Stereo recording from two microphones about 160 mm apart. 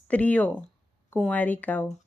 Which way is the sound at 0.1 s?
10° left (ahead or behind).